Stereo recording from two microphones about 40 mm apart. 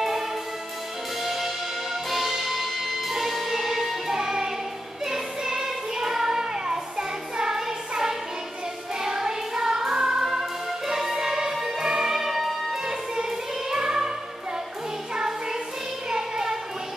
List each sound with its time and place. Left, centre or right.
1.2 s music: centre
12.8 s music: centre
16.1 s music: centre